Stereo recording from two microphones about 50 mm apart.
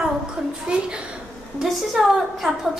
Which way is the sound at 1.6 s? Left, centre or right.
Centre.